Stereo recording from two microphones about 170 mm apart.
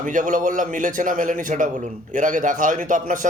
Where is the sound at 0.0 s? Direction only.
50° right (ahead or behind).